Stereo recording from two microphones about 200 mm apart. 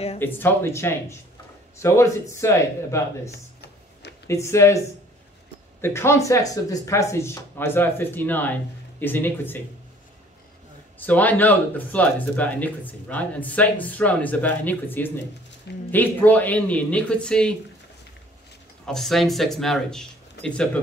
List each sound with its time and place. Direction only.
0.2 s speech: 10° left (ahead or behind)
11.0 s speech: 10° left (ahead or behind)
18.9 s speech: centre (ahead or behind)